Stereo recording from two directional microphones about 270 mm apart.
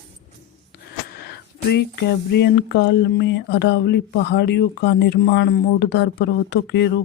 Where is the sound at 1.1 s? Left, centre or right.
Left.